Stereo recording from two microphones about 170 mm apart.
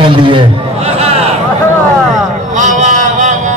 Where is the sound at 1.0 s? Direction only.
35° right (ahead or behind).